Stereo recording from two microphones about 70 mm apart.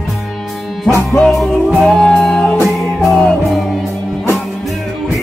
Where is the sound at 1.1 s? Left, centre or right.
Centre.